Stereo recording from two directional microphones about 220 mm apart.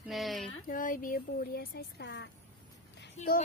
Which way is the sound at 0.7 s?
40° left (ahead or behind).